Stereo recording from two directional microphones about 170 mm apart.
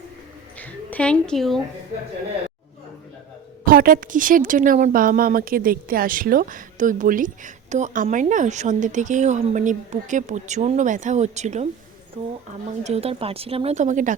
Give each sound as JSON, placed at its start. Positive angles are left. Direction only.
{"t": 0.6, "sound": "a woman's voice", "side_deg": 10}
{"t": 3.7, "sound": "a woman's voice", "side_deg": -60}
{"t": 12.8, "sound": "speech", "side_deg": -35}